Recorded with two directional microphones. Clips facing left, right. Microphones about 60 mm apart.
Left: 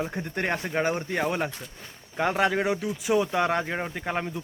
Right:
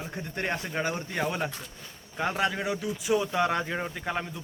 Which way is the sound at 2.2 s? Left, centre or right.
Left.